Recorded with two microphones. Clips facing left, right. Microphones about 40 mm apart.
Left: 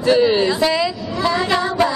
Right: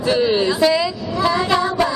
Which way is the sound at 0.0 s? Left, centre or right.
Centre.